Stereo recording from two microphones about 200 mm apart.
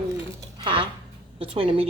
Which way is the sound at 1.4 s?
25° right (ahead or behind).